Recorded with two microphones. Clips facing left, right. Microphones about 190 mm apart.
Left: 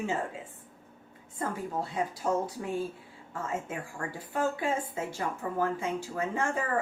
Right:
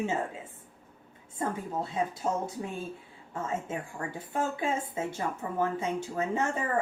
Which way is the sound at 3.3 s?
25° right (ahead or behind).